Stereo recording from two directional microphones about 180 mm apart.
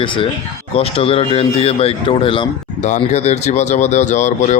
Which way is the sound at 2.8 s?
40° left (ahead or behind).